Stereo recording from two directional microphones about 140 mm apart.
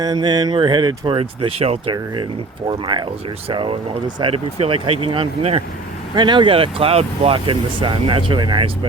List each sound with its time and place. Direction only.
0.0 s speech: 30° right (ahead or behind)